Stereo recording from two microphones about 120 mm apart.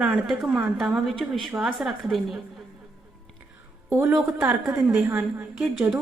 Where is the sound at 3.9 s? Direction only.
25° right (ahead or behind).